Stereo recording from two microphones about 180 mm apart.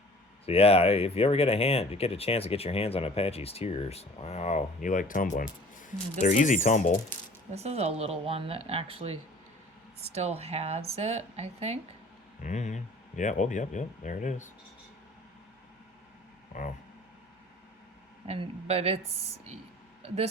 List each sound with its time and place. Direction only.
0.4 s speech: 35° left (ahead or behind)
7.5 s speech: 35° right (ahead or behind)
12.4 s speech: 40° left (ahead or behind)
16.5 s speech: 40° left (ahead or behind)
18.3 s speech: 35° right (ahead or behind)